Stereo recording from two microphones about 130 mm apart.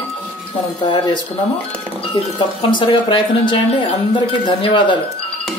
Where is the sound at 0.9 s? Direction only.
35° left (ahead or behind).